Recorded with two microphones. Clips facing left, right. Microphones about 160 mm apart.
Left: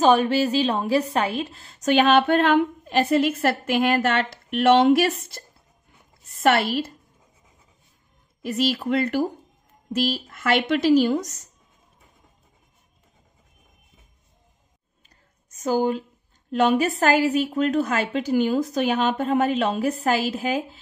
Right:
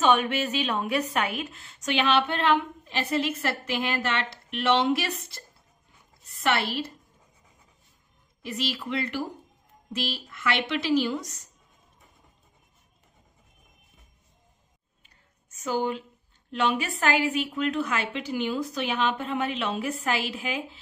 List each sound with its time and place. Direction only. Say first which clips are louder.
0.0 s a woman's voice: left 5 dB; 35° left (ahead or behind)
6.4 s a woman's voice: left 7 dB; 50° left (ahead or behind)
8.4 s a woman's voice: left 8 dB; 45° left (ahead or behind)
15.0 s a sound: left 3 dB; 40° left (ahead or behind)
16.4 s a woman's voice: left 7 dB; 40° left (ahead or behind)